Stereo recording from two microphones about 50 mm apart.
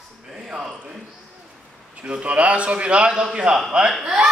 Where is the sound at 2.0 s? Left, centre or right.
Right.